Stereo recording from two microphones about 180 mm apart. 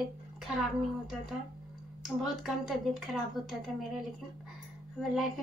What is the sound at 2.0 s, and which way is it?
A woman's voice, centre (ahead or behind).